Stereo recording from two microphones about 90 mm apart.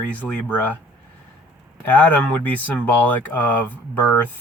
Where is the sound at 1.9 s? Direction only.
15° left (ahead or behind).